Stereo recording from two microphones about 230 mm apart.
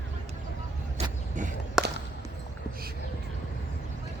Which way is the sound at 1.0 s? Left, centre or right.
Right.